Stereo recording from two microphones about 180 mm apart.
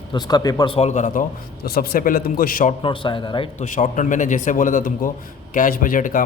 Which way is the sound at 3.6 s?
45° left (ahead or behind).